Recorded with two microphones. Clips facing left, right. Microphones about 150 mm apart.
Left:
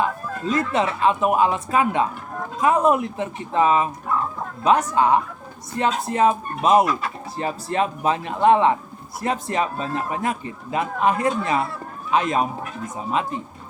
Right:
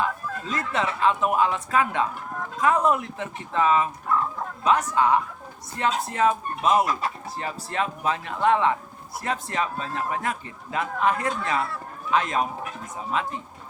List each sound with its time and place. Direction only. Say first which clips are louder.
0.0 s a man's voice: left 4 dB; 15° left (ahead or behind)